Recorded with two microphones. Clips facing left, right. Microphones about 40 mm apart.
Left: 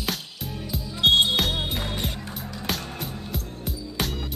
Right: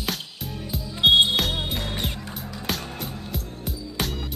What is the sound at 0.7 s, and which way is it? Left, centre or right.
Music, centre.